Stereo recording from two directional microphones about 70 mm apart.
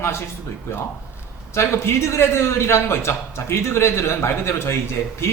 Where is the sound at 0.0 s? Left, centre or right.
Left.